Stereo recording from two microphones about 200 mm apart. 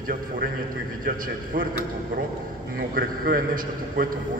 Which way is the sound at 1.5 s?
45° right (ahead or behind).